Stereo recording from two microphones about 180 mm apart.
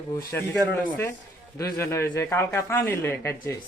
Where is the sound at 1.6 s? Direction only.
15° left (ahead or behind).